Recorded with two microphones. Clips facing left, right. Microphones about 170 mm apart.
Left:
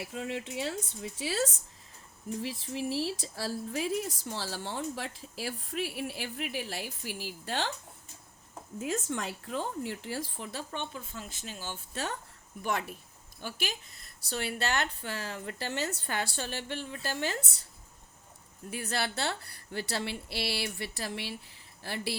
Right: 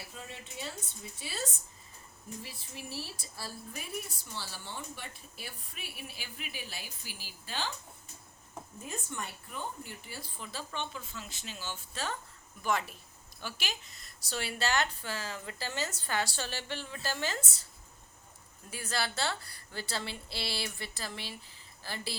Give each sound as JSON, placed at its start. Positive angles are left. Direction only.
{"t": 0.0, "sound": "a woman's voice", "side_deg": 90}
{"t": 8.8, "sound": "a woman's voice", "side_deg": 90}
{"t": 10.8, "sound": "speech", "side_deg": 50}
{"t": 13.4, "sound": "speech", "side_deg": 55}
{"t": 18.7, "sound": "speech", "side_deg": 60}